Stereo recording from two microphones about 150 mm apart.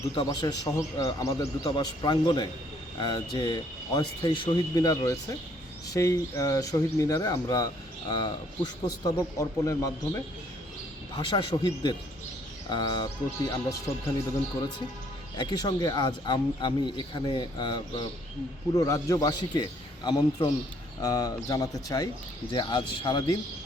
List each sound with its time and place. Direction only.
0.3 s speech: 25° left (ahead or behind)
11.3 s speech: 30° left (ahead or behind)
15.4 s speech: 30° left (ahead or behind)